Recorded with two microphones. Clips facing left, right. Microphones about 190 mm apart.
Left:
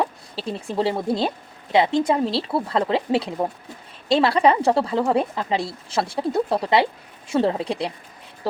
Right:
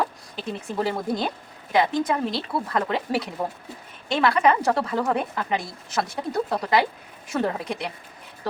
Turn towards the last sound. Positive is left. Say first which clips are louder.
# left 4 dB
turn(degrees=30)  # may be behind; listen again after turning